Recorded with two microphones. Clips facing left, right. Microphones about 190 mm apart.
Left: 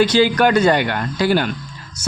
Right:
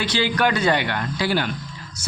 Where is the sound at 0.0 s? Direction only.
45° left (ahead or behind).